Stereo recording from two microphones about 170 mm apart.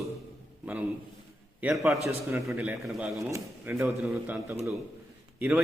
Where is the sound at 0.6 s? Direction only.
10° right (ahead or behind).